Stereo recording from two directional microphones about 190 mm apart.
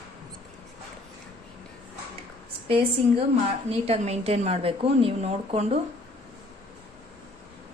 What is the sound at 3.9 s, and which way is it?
A woman's voice, 35° right (ahead or behind).